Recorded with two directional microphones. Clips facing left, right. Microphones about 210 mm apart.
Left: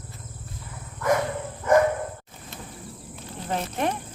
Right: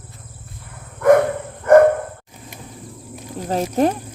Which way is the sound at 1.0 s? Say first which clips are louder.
Right 10 dB; 60° right (ahead or behind).